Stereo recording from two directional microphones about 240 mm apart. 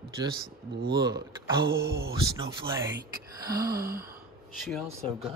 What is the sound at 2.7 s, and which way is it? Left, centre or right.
Speech, centre.